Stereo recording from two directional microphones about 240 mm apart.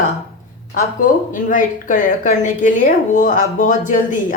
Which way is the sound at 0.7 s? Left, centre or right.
Left.